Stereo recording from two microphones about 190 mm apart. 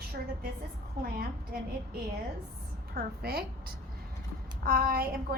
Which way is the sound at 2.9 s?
55° right (ahead or behind).